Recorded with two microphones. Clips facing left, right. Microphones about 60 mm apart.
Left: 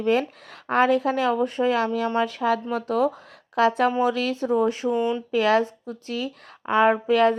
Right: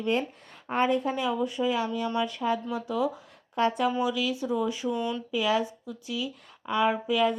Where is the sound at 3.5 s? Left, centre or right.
Left.